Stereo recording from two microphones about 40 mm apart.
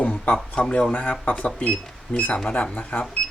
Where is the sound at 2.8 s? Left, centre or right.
Left.